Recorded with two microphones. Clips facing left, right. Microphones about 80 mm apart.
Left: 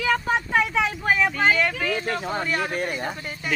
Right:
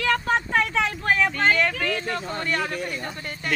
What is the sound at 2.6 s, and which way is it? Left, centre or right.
Speech, left.